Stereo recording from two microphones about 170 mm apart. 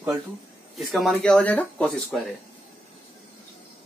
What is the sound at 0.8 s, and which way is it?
Speech, centre (ahead or behind).